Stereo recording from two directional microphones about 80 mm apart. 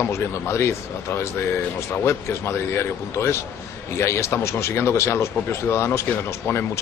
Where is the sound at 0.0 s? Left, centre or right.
Left.